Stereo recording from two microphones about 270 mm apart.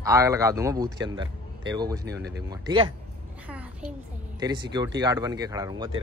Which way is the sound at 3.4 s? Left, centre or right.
Centre.